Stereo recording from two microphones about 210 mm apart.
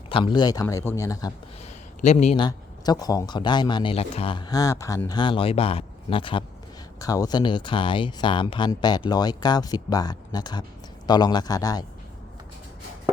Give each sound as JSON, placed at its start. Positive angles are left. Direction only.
{"t": 0.1, "sound": "speech", "side_deg": 25}
{"t": 1.6, "sound": "a sound", "side_deg": 30}
{"t": 2.3, "sound": "speech", "side_deg": 20}